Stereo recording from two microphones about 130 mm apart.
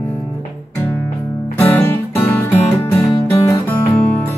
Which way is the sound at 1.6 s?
15° left (ahead or behind).